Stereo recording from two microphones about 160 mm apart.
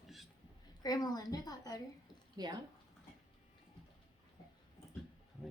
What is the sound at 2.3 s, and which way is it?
Speech, 25° right (ahead or behind).